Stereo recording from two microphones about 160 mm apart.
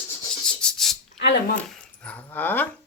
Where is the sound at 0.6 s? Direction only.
5° left (ahead or behind).